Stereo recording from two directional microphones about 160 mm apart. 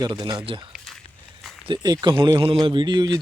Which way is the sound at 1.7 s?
25° right (ahead or behind).